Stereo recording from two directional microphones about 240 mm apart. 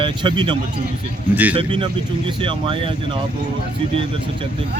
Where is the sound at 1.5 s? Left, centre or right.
Right.